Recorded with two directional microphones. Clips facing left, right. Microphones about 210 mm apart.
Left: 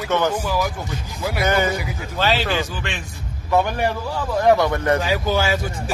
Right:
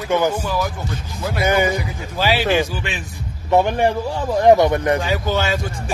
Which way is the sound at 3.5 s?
20° right (ahead or behind).